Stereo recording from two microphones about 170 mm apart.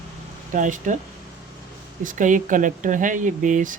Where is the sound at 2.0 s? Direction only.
50° right (ahead or behind).